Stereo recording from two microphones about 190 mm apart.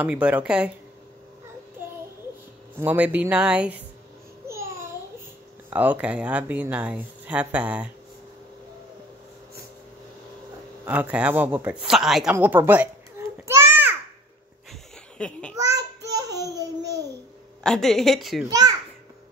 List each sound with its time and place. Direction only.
0.0 s speech: 5° right (ahead or behind)
2.8 s speech: 10° right (ahead or behind)
5.7 s speech: 10° right (ahead or behind)
10.9 s speech: 10° right (ahead or behind)
14.7 s a sound: 5° left (ahead or behind)
15.5 s babbling: 15° right (ahead or behind)
17.6 s a woman's voice: centre (ahead or behind)
18.4 s a child's voice: 20° right (ahead or behind)